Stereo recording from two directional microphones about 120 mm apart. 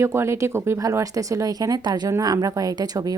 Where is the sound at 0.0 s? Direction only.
20° right (ahead or behind).